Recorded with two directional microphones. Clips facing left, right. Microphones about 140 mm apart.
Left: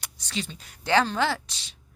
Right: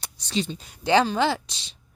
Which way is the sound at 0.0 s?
25° right (ahead or behind).